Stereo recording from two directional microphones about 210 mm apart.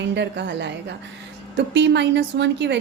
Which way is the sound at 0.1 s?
55° right (ahead or behind).